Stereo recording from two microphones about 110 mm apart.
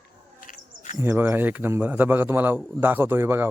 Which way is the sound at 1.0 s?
20° right (ahead or behind).